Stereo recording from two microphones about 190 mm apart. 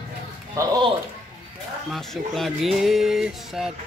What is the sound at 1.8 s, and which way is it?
Speech, centre (ahead or behind).